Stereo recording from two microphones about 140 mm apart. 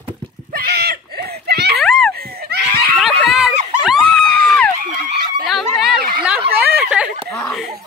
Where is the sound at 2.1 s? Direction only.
90° right.